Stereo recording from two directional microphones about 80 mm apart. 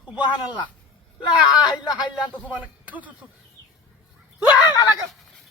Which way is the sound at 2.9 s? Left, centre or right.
Centre.